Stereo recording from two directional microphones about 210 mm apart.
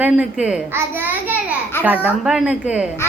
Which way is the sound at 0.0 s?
5° right (ahead or behind).